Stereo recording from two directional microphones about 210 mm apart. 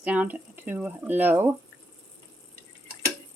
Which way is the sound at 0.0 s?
5° right (ahead or behind).